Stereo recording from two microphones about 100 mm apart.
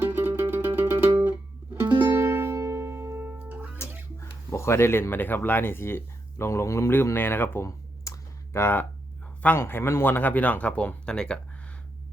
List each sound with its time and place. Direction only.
0.0 s music: 20° right (ahead or behind)
4.2 s speech: 25° left (ahead or behind); by 11.3 s 10° left (ahead or behind)